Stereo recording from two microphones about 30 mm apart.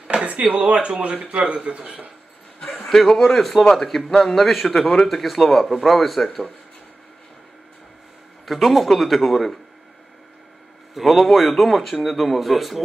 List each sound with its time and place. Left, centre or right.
0.2 s speech: right
0.8 s speech: right
2.9 s speech: centre
8.5 s speech: centre
11.0 s speech: centre